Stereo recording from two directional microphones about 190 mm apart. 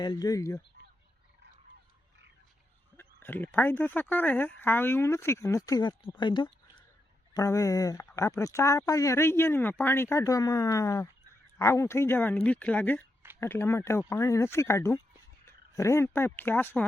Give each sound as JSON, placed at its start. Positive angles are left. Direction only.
{"t": 0.0, "sound": "speech", "side_deg": 20}
{"t": 3.0, "sound": "speech", "side_deg": 10}